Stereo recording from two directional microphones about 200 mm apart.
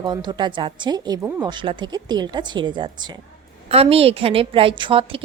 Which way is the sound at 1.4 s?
25° right (ahead or behind).